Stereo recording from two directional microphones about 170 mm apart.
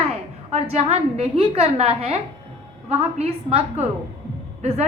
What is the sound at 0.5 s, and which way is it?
A woman's voice, 40° right (ahead or behind).